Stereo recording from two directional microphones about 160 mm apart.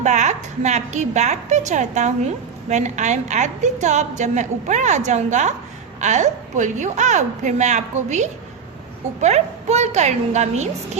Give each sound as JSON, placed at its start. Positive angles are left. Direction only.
{"t": 0.0, "sound": "a woman's voice", "side_deg": -50}